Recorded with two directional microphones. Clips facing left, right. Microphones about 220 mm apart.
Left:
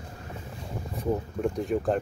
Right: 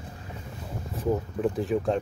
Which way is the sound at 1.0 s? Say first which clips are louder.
Right 2 dB; centre (ahead or behind).